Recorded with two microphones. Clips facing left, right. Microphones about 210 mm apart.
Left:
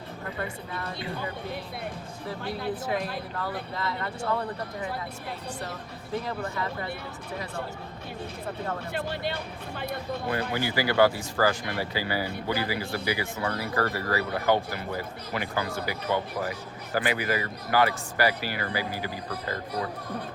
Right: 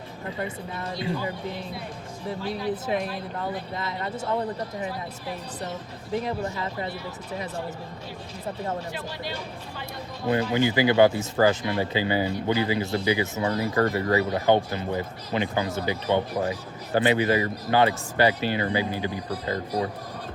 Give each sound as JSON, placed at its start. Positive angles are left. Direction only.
{"t": 0.3, "sound": "speech", "side_deg": -20}
{"t": 2.8, "sound": "speech", "side_deg": -20}
{"t": 6.1, "sound": "speech", "side_deg": -20}
{"t": 8.9, "sound": "speech", "side_deg": 55}
{"t": 10.5, "sound": "speech", "side_deg": -20}